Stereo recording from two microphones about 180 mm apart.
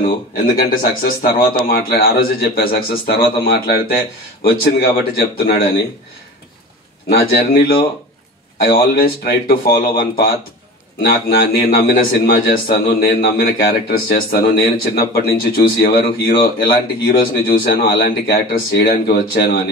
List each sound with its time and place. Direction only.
0.6 s a man's voice: 55° left (ahead or behind)
7.1 s a man's voice: 60° left (ahead or behind)